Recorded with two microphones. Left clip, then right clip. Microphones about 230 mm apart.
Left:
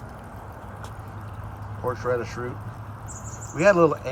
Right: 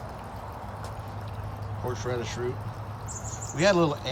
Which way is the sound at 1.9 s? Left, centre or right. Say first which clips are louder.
Left 6 dB; centre.